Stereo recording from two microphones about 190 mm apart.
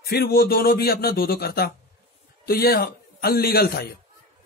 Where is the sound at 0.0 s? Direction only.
55° left (ahead or behind).